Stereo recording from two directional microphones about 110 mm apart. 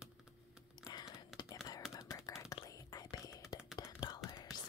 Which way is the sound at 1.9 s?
35° left (ahead or behind).